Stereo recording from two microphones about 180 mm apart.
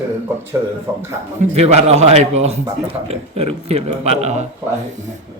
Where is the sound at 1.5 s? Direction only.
35° right (ahead or behind).